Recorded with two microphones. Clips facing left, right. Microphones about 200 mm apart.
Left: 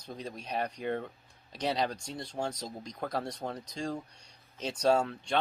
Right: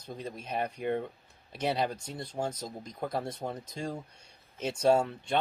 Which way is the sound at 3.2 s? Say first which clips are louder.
Right 1 dB; 20° right (ahead or behind).